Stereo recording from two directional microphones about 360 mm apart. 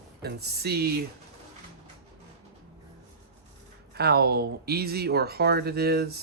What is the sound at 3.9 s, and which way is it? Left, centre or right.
Speech, right.